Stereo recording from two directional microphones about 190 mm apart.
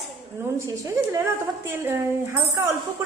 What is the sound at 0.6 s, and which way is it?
A woman's voice, 15° right (ahead or behind).